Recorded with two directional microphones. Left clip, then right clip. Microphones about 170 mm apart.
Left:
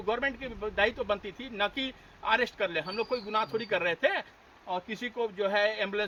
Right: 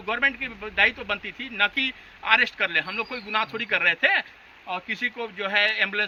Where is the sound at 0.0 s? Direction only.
15° left (ahead or behind).